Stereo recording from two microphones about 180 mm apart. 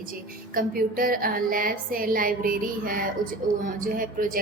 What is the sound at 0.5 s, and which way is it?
A woman's voice, 50° right (ahead or behind).